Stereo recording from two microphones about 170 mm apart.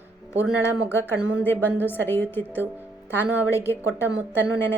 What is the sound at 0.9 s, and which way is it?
A woman's voice, 15° left (ahead or behind).